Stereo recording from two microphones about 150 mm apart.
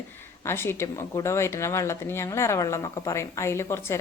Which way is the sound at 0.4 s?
15° left (ahead or behind).